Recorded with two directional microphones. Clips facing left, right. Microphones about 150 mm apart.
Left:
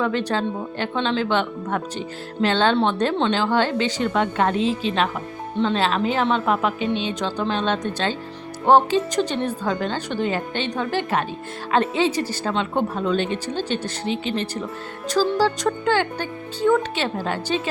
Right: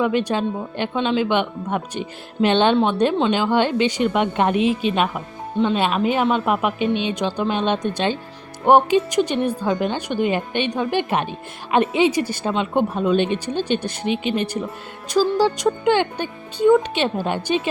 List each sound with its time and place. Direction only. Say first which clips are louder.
0.0 s speech: right 2 dB; 15° right (ahead or behind)